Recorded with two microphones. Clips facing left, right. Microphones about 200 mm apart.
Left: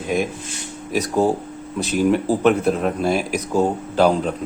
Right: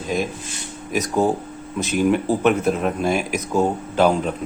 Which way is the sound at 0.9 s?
30° left (ahead or behind).